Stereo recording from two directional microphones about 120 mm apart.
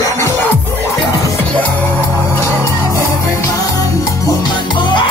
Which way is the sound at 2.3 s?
20° left (ahead or behind).